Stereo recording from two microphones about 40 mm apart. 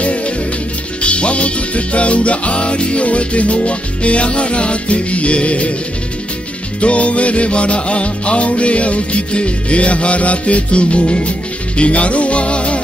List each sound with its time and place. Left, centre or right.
1.0 s music: left
6.8 s music: left